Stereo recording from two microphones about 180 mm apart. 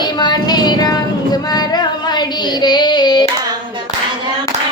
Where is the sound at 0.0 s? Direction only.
25° left (ahead or behind).